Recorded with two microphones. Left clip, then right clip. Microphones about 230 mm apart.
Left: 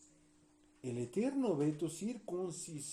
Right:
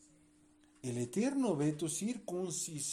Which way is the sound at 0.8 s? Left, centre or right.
Right.